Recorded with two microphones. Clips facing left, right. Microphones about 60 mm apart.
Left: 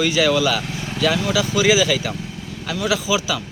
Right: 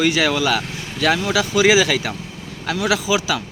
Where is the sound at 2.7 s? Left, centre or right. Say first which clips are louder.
Right 2 dB; right.